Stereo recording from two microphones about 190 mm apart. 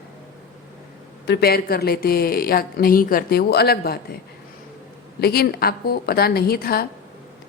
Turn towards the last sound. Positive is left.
turn(degrees=55)  # may be behind; listen again after turning